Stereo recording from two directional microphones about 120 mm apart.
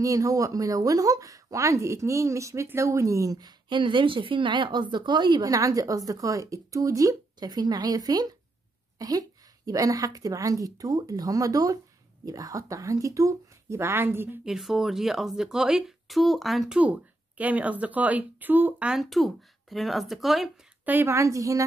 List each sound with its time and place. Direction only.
0.0 s speech: 30° right (ahead or behind)
8.9 s a sound: 30° right (ahead or behind)
9.7 s speech: 30° right (ahead or behind)
14.4 s speech: 5° right (ahead or behind)
20.8 s speech: 20° right (ahead or behind)